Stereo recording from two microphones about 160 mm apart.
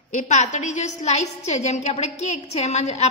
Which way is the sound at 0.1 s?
50° left (ahead or behind).